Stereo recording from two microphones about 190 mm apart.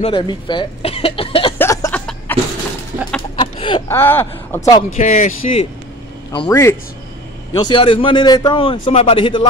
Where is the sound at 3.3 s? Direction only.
25° left (ahead or behind).